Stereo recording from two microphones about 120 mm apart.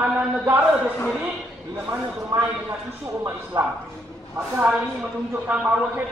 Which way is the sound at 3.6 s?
25° right (ahead or behind).